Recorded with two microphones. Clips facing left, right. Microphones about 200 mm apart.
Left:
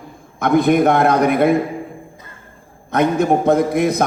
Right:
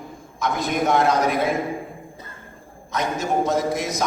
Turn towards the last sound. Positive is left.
turn(degrees=60)  # may be behind; listen again after turning